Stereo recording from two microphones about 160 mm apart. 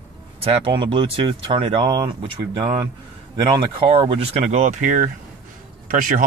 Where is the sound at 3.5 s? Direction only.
30° right (ahead or behind); by 6.2 s 55° right (ahead or behind).